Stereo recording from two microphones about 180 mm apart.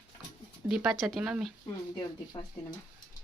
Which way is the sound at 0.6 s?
Centre (ahead or behind).